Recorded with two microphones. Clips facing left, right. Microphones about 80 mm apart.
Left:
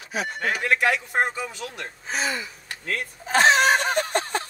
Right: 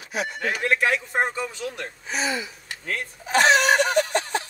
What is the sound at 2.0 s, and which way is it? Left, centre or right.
Gasp, left.